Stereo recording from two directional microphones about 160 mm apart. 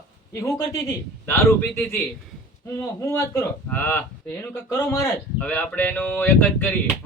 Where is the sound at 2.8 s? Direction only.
15° left (ahead or behind).